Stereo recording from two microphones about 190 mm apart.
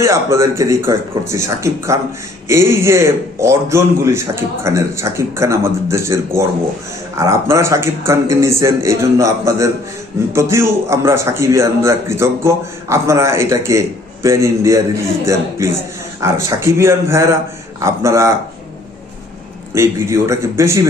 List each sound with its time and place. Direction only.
0.0 s a man's voice: 15° right (ahead or behind)
19.7 s a man's voice: 15° right (ahead or behind)